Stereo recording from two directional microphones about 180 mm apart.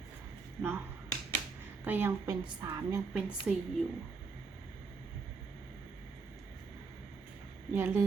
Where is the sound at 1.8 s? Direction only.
10° right (ahead or behind).